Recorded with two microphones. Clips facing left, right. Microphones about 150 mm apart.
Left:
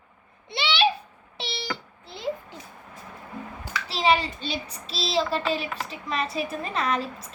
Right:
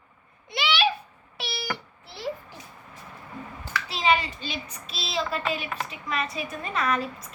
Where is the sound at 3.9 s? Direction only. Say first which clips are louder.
Left 2 dB; 30° left (ahead or behind).